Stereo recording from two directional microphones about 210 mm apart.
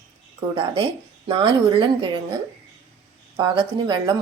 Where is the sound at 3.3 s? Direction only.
20° right (ahead or behind).